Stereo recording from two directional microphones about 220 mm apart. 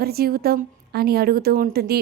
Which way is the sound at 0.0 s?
45° right (ahead or behind).